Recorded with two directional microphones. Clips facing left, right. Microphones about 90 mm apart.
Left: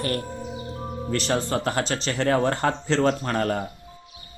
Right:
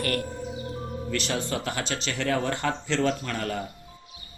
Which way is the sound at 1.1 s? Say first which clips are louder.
Left 5 dB; 40° left (ahead or behind).